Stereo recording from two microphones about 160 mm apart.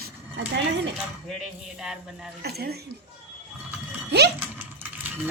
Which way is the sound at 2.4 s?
85° right.